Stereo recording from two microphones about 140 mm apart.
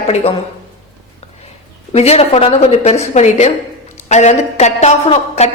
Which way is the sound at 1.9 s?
50° left (ahead or behind).